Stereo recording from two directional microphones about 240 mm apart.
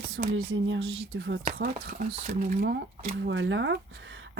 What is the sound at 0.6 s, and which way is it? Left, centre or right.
Speech, right.